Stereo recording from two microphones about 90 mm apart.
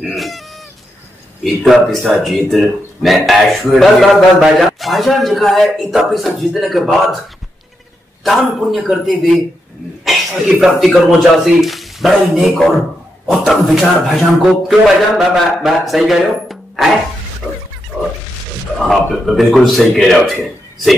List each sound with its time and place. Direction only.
0.0 s speech: centre (ahead or behind)
1.4 s speech: centre (ahead or behind)
8.2 s speech: centre (ahead or behind)
17.4 s a sound: 15° left (ahead or behind)
18.8 s speech: centre (ahead or behind)